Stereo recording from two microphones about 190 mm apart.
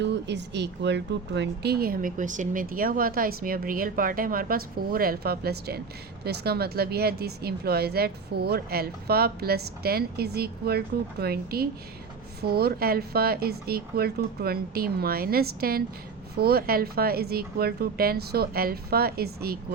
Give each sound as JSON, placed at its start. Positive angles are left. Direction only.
{"t": 0.0, "sound": "speech", "side_deg": -65}